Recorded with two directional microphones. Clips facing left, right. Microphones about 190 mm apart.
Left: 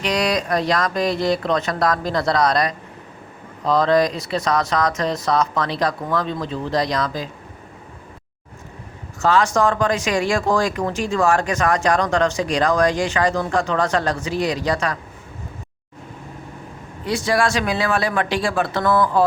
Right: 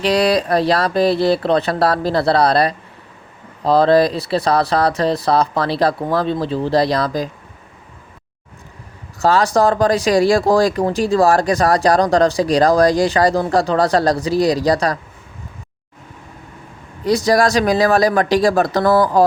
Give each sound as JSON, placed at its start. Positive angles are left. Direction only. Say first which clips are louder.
{"t": 0.0, "sound": "speech", "louder": "right 6 dB", "side_deg": -35}
{"t": 9.2, "sound": "speech", "louder": "right 3 dB", "side_deg": -35}
{"t": 17.1, "sound": "speech", "louder": "right 5 dB", "side_deg": -40}